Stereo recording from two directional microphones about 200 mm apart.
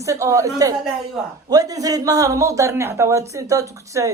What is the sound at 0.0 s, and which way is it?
Speech, 15° right (ahead or behind).